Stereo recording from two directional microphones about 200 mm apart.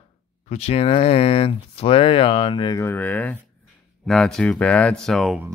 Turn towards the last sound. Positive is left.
turn(degrees=0)  # may be behind; listen again after turning